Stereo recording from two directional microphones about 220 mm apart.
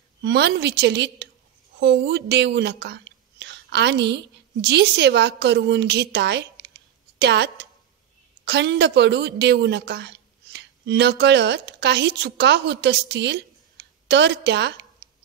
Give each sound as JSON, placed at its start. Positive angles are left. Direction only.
{"t": 0.2, "sound": "a woman's voice", "side_deg": -50}